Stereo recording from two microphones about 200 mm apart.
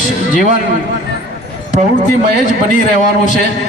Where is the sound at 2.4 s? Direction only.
40° left (ahead or behind).